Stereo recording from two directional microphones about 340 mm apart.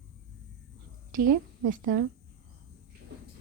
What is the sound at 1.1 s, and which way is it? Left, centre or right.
Speech, right.